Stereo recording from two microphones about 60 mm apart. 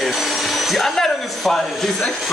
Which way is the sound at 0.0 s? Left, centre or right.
Centre.